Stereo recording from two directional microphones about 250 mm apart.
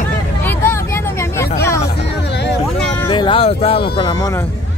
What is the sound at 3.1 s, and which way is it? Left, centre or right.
Speech, centre.